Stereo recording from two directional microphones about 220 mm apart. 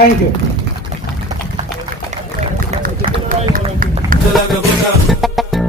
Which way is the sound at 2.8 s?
40° right (ahead or behind).